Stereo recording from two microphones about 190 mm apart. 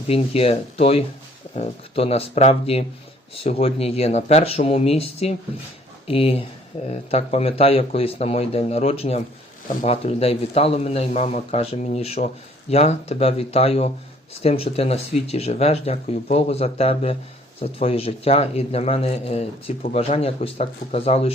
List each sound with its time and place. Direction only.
0.1 s speech: 30° left (ahead or behind)